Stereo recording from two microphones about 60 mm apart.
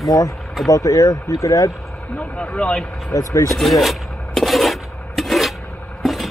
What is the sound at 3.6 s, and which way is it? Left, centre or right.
Filing, centre.